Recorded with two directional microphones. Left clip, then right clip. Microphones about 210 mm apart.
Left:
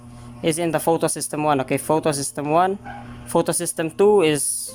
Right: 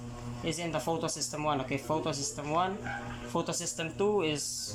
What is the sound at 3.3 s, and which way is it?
Mantra, 40° left (ahead or behind).